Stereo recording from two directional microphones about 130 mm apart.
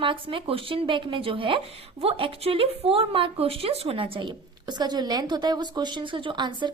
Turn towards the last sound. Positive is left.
turn(degrees=-35)  # may be behind; listen again after turning